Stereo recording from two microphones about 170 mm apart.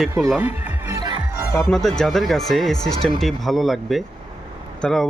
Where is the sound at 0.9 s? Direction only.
25° right (ahead or behind).